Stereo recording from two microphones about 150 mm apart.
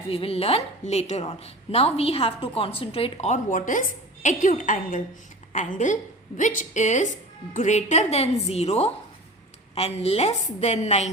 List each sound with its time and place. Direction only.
0.1 s a woman's voice: 40° left (ahead or behind)